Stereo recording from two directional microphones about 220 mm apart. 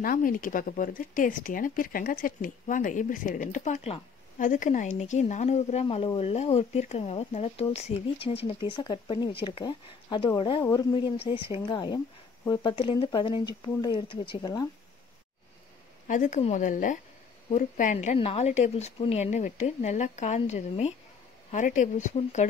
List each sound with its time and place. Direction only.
0.0 s speech: 40° left (ahead or behind); by 14.7 s 20° left (ahead or behind)
16.1 s a woman's voice: 35° left (ahead or behind)